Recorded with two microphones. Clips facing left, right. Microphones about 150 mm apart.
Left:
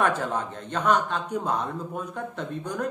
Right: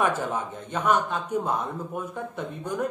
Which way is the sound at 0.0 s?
10° right (ahead or behind).